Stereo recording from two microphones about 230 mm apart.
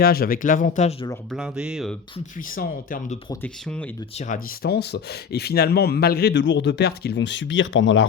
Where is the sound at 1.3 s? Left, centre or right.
Centre.